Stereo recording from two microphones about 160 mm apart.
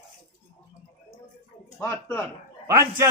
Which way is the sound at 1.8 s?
15° left (ahead or behind).